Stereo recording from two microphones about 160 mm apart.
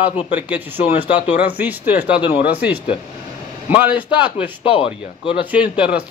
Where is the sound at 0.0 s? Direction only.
10° right (ahead or behind).